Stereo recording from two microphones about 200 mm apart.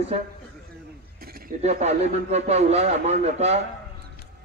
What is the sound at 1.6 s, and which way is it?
A man's voice, 35° right (ahead or behind).